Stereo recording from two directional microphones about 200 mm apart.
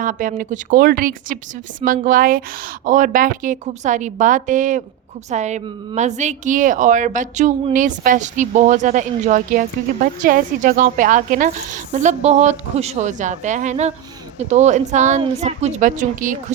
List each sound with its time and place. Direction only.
0.0 s speech: 40° right (ahead or behind)